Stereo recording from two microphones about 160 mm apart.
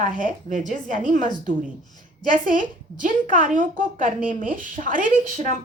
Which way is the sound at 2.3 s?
55° right (ahead or behind).